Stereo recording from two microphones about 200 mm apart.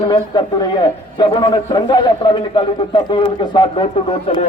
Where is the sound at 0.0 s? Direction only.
20° left (ahead or behind).